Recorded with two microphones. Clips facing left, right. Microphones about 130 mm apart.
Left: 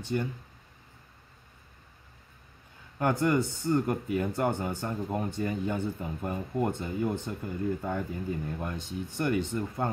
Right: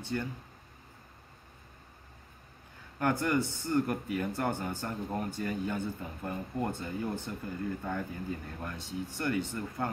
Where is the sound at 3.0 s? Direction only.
20° left (ahead or behind).